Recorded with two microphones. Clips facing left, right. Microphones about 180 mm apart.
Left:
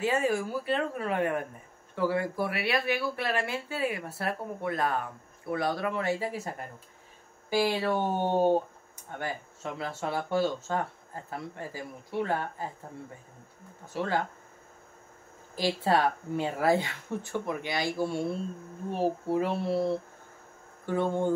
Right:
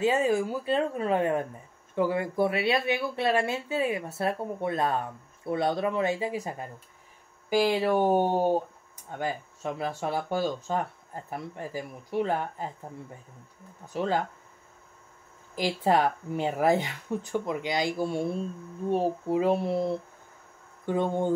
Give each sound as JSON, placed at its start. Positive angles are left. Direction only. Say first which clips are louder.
{"t": 0.0, "sound": "speech", "louder": "right 3 dB", "side_deg": -20}
{"t": 13.9, "sound": "speech", "louder": "right 2 dB", "side_deg": -20}
{"t": 15.5, "sound": "speech", "louder": "right 2 dB", "side_deg": -15}
{"t": 19.2, "sound": "speech", "louder": "right 3 dB", "side_deg": -15}